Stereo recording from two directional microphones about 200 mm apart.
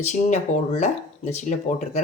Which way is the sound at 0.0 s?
35° left (ahead or behind).